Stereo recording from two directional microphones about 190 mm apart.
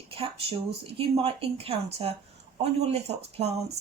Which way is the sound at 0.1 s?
30° right (ahead or behind).